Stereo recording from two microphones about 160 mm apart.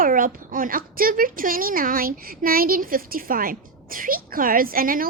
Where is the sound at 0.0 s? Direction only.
60° right (ahead or behind).